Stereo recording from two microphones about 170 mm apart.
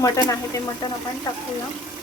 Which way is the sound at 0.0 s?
20° left (ahead or behind).